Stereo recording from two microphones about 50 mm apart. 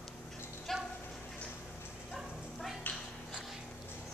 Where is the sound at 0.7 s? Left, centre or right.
Centre.